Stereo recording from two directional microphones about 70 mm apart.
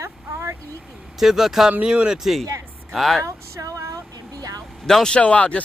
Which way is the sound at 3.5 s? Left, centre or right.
Right.